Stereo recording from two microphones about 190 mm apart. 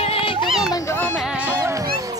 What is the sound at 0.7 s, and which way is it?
Dog, 10° left (ahead or behind).